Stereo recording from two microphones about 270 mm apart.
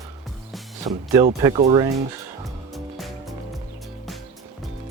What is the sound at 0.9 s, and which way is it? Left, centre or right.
Speech, centre.